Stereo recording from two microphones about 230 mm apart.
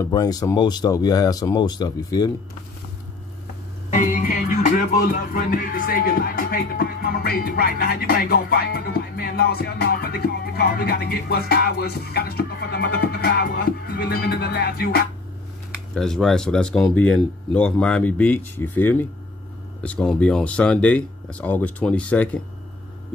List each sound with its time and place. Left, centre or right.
0.0 s speech: centre
3.9 s music: left
15.9 s speech: centre